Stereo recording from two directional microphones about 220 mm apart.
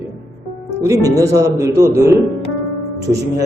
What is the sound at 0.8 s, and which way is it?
Speech, 15° right (ahead or behind).